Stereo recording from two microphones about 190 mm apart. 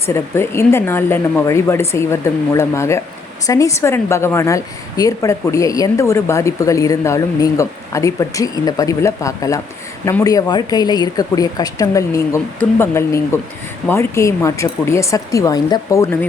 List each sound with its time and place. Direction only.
0.1 s a woman's voice: 15° left (ahead or behind)